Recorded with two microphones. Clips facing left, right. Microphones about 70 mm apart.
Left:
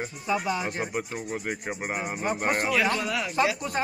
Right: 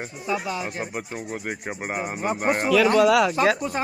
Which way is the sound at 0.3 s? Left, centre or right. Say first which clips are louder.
Even; centre.